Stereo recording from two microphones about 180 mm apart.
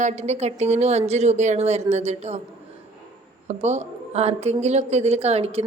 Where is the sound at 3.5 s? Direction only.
40° right (ahead or behind).